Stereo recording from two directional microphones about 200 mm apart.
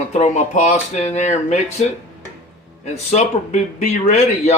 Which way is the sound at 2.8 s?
35° left (ahead or behind).